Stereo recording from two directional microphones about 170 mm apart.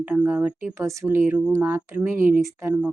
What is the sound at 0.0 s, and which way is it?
A woman's voice, 10° right (ahead or behind).